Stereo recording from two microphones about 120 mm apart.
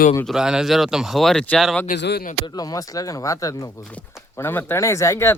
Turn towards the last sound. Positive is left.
turn(degrees=25)  # may be behind; listen again after turning